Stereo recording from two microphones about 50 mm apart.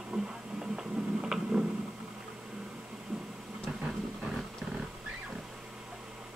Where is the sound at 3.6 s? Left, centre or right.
Centre.